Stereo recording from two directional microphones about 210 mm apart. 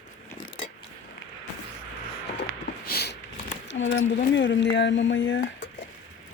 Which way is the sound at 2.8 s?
50° left (ahead or behind).